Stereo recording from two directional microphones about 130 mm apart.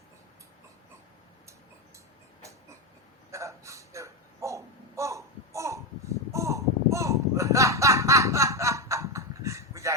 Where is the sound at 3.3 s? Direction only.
25° right (ahead or behind).